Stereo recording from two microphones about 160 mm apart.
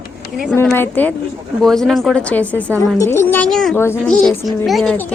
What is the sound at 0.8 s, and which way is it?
Speech, 10° left (ahead or behind).